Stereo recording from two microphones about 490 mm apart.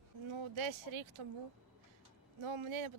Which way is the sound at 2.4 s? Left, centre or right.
Right.